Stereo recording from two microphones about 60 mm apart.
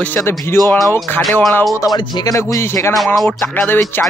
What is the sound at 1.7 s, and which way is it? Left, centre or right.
Speech, left.